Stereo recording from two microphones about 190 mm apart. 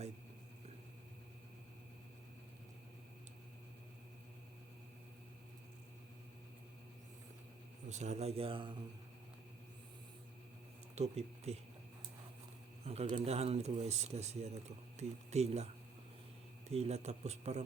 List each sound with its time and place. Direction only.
7.9 s speech: 40° right (ahead or behind)
10.9 s speech: 35° right (ahead or behind)
12.8 s speech: 35° right (ahead or behind)
16.7 s speech: 35° right (ahead or behind)